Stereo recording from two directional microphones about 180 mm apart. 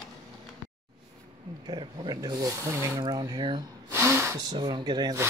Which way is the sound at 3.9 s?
15° right (ahead or behind).